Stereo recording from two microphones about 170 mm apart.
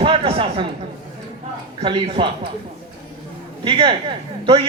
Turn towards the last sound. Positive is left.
turn(degrees=-30)  # may be behind; listen again after turning